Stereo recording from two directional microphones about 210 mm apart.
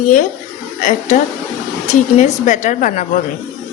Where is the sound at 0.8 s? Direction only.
40° left (ahead or behind).